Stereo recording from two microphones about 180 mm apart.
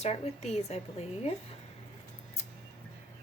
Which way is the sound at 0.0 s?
35° left (ahead or behind).